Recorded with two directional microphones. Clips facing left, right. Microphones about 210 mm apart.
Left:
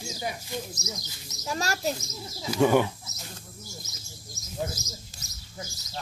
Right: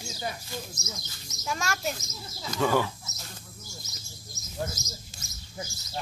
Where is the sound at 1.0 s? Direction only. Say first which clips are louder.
Left 2 dB; 35° left (ahead or behind).